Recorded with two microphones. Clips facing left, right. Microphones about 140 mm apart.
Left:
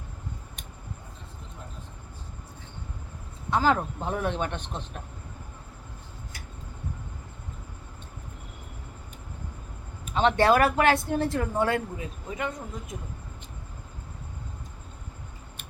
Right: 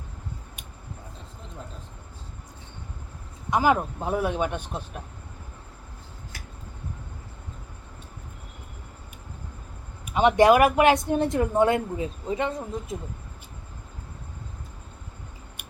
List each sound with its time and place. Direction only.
3.5 s speech: 15° right (ahead or behind)
10.1 s speech: 15° right (ahead or behind); by 13.0 s 30° right (ahead or behind)